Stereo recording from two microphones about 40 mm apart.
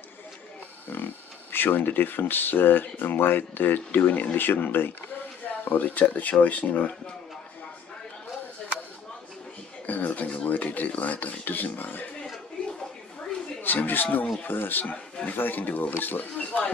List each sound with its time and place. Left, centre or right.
0.8 s speech: left
5.4 s speech: left
9.8 s speech: left
13.6 s speech: left